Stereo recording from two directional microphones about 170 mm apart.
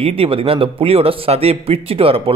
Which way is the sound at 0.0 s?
35° right (ahead or behind).